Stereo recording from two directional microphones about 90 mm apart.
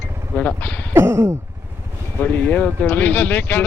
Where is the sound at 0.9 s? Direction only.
30° right (ahead or behind).